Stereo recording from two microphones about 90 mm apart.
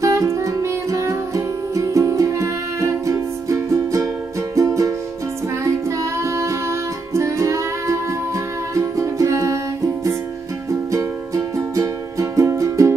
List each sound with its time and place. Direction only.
0.0 s music: 35° right (ahead or behind)
10.9 s music: 35° right (ahead or behind)